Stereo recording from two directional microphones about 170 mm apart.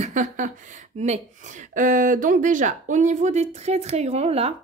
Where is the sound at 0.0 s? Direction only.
45° right (ahead or behind).